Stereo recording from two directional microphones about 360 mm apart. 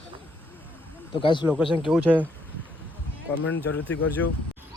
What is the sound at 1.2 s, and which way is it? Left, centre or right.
Speech, centre.